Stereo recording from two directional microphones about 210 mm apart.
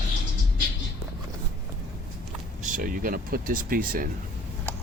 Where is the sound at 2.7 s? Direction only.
40° right (ahead or behind).